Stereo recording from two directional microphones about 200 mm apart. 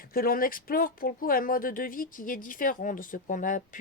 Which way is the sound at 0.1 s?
45° left (ahead or behind).